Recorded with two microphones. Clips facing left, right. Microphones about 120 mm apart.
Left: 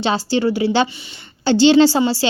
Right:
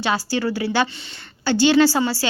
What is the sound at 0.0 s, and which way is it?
Speech, 25° left (ahead or behind).